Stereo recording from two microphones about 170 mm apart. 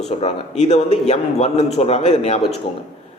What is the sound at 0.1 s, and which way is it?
A man's voice, 40° left (ahead or behind).